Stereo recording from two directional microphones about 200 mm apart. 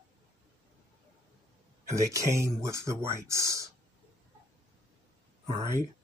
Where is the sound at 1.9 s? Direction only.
15° right (ahead or behind).